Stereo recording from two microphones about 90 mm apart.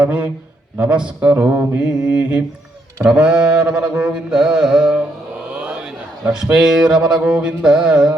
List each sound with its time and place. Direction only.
0.0 s mantra: 15° right (ahead or behind)
1.5 s mantra: 25° right (ahead or behind)
2.0 s mantra: 10° right (ahead or behind)
5.5 s speech: 15° right (ahead or behind)